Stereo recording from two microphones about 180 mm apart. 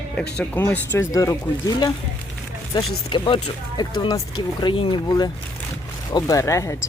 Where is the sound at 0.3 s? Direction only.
10° left (ahead or behind).